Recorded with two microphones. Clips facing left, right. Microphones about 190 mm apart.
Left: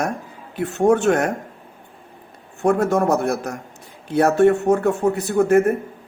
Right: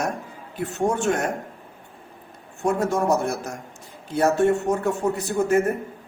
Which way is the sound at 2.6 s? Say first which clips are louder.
Left 5 dB; 60° left (ahead or behind).